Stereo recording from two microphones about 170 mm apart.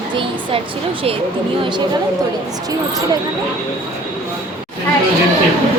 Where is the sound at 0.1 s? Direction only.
30° right (ahead or behind).